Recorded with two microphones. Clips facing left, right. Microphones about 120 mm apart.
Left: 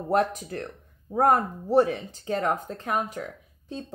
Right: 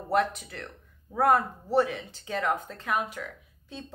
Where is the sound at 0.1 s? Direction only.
40° left (ahead or behind).